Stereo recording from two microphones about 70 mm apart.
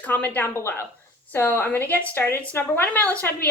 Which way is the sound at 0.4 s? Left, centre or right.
Left.